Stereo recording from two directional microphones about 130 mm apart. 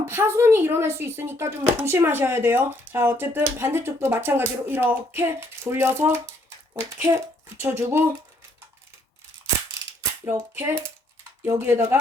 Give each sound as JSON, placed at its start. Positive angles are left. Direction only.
{"t": 0.0, "sound": "speech", "side_deg": -20}
{"t": 10.0, "sound": "speech", "side_deg": -20}